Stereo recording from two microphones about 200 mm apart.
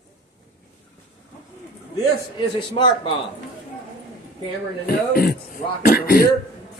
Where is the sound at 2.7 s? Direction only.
25° left (ahead or behind).